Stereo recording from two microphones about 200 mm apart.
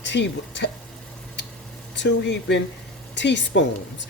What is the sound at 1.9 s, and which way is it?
Speech, 60° left (ahead or behind).